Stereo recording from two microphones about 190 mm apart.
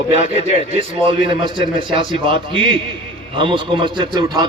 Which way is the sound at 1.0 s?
25° right (ahead or behind).